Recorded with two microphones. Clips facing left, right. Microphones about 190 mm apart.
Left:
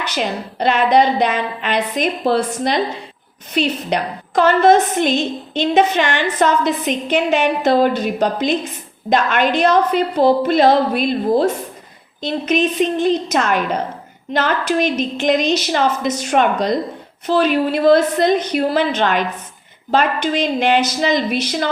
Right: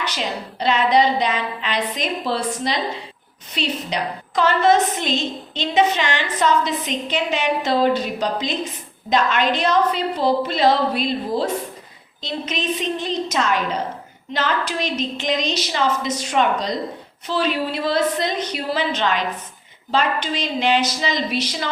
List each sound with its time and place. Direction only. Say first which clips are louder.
0.0 s a woman's voice: left 4 dB; 50° left (ahead or behind)